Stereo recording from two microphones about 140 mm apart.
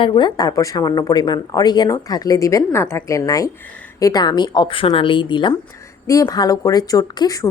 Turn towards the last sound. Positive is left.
turn(degrees=30)  # may be behind; listen again after turning